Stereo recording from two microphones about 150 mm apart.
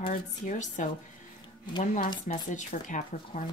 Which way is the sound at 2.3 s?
60° left (ahead or behind).